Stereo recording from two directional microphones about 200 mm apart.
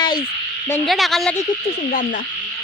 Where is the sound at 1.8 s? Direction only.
45° left (ahead or behind).